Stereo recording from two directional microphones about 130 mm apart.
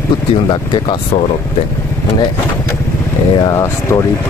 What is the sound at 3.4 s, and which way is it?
Speech, 25° left (ahead or behind).